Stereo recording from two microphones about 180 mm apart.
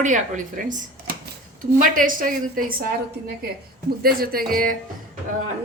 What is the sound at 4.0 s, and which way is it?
Speech, 55° right (ahead or behind).